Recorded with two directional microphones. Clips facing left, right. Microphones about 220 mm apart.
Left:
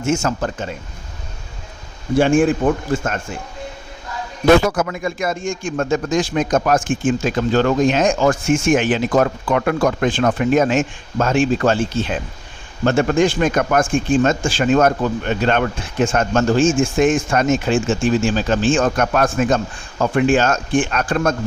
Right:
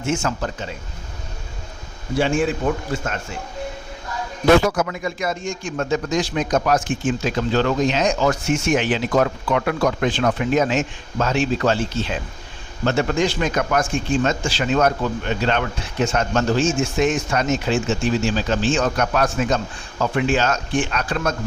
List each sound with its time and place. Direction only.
0.0 s a man's voice: 45° left (ahead or behind)
2.1 s a man's voice: 50° left (ahead or behind)
4.6 s a man's voice: 50° left (ahead or behind)